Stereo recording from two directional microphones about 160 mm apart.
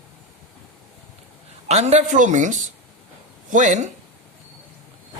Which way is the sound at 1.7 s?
45° right (ahead or behind).